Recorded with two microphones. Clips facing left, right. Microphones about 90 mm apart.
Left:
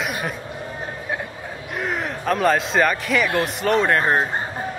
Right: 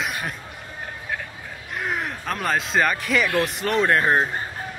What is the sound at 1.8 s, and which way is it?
A man's voice, centre (ahead or behind).